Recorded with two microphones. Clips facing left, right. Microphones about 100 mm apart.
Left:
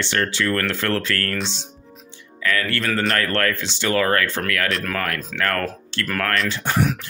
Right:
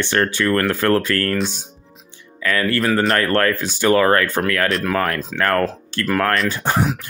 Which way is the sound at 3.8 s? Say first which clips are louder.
Right 5 dB; 30° right (ahead or behind).